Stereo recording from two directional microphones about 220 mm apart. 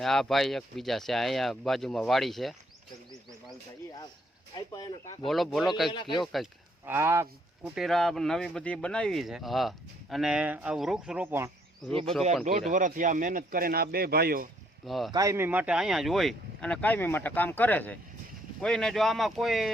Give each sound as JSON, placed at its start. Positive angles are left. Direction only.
{"t": 0.0, "sound": "speech", "side_deg": 0}
{"t": 4.5, "sound": "speech", "side_deg": 20}
{"t": 5.2, "sound": "speech", "side_deg": 0}
{"t": 5.9, "sound": "speech", "side_deg": 20}
{"t": 6.1, "sound": "speech", "side_deg": 0}
{"t": 6.8, "sound": "speech", "side_deg": -10}
{"t": 7.8, "sound": "speech", "side_deg": 0}
{"t": 11.8, "sound": "speech", "side_deg": 0}
{"t": 12.7, "sound": "speech", "side_deg": -35}
{"t": 14.8, "sound": "speech", "side_deg": 0}
{"t": 15.1, "sound": "speech", "side_deg": -15}